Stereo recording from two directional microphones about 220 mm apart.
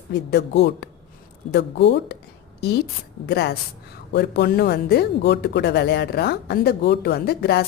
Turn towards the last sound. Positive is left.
turn(degrees=45)  # may be behind; listen again after turning